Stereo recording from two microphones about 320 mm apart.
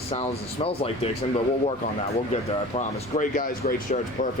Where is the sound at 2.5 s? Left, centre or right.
Centre.